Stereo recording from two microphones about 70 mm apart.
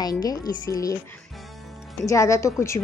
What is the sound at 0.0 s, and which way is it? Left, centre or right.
Speech, left.